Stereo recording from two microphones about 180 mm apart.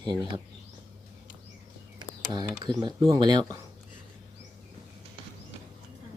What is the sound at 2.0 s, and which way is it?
Speech, 25° right (ahead or behind).